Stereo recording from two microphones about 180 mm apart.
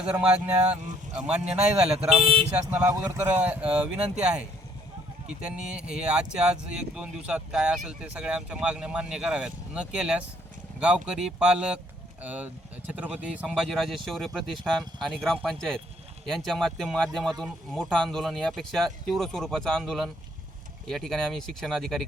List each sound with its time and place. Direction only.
0.0 s speech: 5° right (ahead or behind)
2.2 s speech: 30° right (ahead or behind)
2.6 s speech: 5° right (ahead or behind)